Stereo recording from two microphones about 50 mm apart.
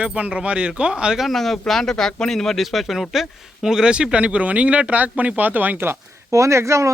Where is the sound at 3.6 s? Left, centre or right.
Centre; by 5.9 s right.